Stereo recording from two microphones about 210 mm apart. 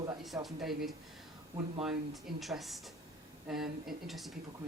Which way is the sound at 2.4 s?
Centre (ahead or behind).